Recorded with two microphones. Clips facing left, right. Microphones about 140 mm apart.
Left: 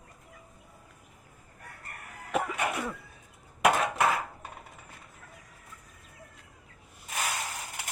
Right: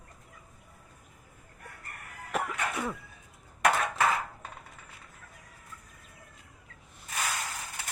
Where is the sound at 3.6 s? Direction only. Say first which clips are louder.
Left 2 dB; 10° left (ahead or behind).